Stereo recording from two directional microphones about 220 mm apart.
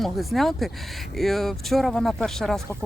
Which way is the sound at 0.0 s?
Centre (ahead or behind).